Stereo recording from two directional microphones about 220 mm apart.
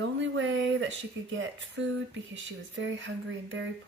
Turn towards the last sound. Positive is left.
turn(degrees=-60)  # may be behind; listen again after turning